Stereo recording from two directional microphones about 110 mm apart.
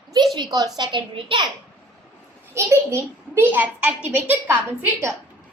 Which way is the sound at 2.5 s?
25° right (ahead or behind).